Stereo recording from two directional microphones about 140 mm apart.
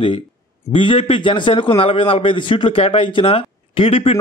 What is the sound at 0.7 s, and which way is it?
A man's voice, 40° left (ahead or behind).